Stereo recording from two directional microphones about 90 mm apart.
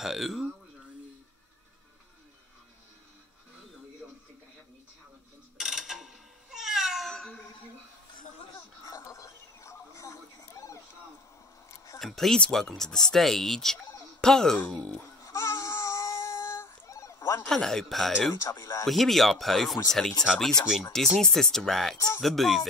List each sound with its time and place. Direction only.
0.0 s speech: 5° right (ahead or behind)
5.6 s cat: 5° right (ahead or behind)
8.8 s a sound: 35° left (ahead or behind)
12.0 s speech: 5° left (ahead or behind)
15.2 s a sound: 35° left (ahead or behind)
17.5 s speech: 5° left (ahead or behind)
18.4 s speech: 35° left (ahead or behind)
18.9 s speech: centre (ahead or behind)
21.9 s speech: 30° left (ahead or behind)
22.2 s speech: centre (ahead or behind)